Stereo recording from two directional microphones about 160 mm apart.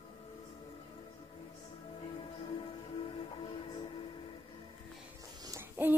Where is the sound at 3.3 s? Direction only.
35° left (ahead or behind).